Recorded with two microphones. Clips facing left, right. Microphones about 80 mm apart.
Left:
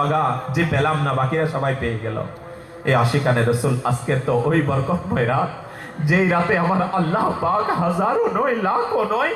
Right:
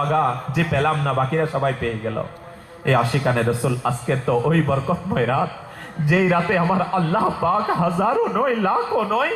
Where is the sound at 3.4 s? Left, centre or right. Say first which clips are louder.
Left 1 dB; centre.